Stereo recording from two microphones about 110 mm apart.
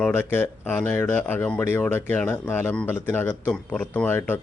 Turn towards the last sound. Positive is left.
turn(degrees=20)  # may be behind; listen again after turning